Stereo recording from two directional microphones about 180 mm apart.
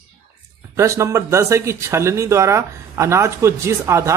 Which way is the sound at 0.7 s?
15° right (ahead or behind).